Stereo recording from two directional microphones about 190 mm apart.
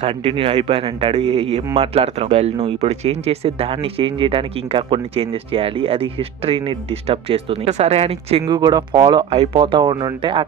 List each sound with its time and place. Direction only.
0.0 s speech: 30° right (ahead or behind)
8.5 s speech: 20° right (ahead or behind)